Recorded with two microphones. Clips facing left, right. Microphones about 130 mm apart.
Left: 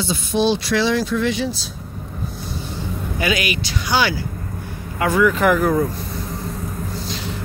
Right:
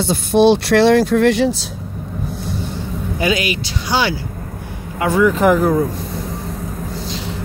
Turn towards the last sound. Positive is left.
turn(degrees=-25)  # may be behind; listen again after turning